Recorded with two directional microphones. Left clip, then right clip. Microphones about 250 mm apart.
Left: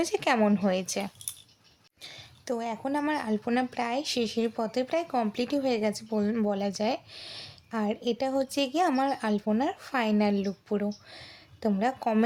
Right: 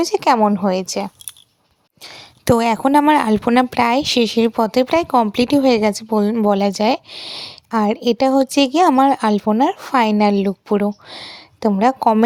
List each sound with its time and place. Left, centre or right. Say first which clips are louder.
0.0 s speech: right 11 dB; right